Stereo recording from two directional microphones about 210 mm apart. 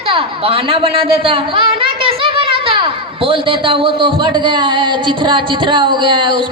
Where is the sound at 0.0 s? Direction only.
25° right (ahead or behind).